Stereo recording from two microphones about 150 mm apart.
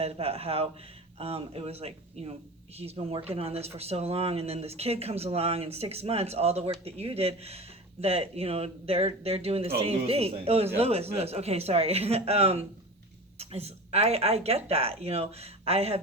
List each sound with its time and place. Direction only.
0.0 s speech: 40° right (ahead or behind)